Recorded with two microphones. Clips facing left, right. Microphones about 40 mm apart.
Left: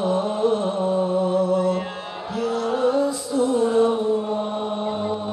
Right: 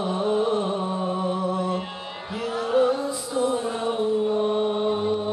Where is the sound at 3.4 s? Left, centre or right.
Centre.